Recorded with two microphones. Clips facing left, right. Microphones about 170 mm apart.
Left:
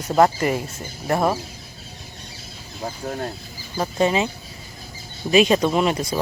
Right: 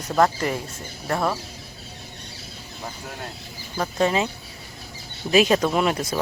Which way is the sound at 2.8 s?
40° left (ahead or behind).